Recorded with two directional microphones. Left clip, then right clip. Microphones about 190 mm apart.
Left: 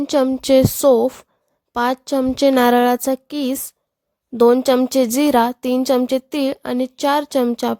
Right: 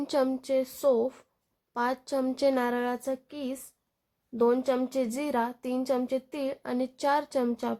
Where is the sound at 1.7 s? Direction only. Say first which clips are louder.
Left 10 dB; 40° left (ahead or behind).